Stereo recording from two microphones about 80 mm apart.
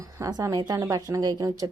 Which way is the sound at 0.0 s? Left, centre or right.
Right.